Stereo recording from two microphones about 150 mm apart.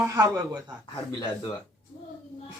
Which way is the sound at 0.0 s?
20° right (ahead or behind).